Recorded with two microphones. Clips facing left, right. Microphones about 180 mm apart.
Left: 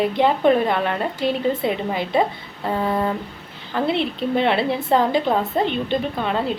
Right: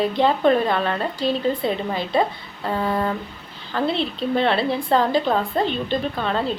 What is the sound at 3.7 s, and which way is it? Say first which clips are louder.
A woman's voice: left 1 dB; 20° left (ahead or behind).